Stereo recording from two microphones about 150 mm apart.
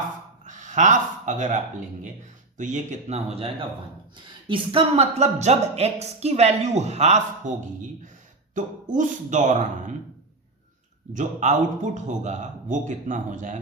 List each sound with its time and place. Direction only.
0.4 s a man's voice: 55° right (ahead or behind)
11.1 s a man's voice: 55° right (ahead or behind)